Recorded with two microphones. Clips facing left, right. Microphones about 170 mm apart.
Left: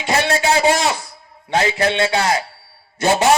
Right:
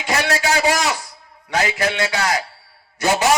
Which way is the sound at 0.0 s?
25° left (ahead or behind).